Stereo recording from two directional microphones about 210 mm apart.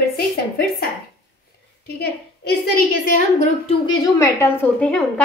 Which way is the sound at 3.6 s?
20° left (ahead or behind).